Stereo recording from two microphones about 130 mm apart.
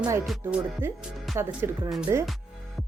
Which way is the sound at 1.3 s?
15° right (ahead or behind).